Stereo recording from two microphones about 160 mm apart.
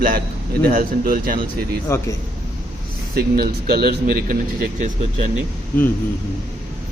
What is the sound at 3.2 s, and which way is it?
Speech, 70° right (ahead or behind).